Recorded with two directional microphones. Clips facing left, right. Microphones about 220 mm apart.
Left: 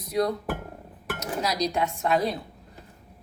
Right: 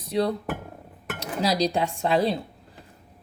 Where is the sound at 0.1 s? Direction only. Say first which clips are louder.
Right 1 dB; 30° right (ahead or behind).